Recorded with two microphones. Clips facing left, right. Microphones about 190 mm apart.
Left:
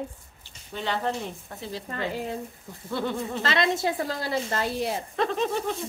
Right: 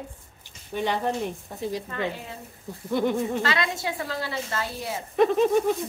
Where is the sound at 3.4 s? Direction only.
35° left (ahead or behind).